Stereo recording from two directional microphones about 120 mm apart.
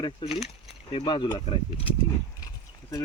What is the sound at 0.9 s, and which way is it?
Speech, 40° left (ahead or behind).